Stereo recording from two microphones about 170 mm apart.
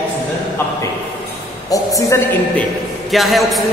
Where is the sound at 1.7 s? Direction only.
20° left (ahead or behind).